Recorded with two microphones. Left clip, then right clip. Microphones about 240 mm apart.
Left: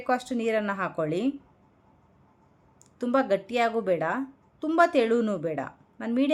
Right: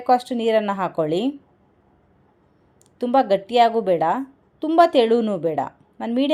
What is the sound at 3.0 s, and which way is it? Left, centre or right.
A woman's voice, centre.